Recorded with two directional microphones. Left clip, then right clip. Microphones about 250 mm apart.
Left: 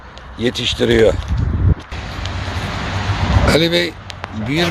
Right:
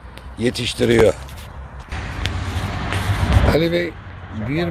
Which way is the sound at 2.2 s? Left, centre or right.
Right.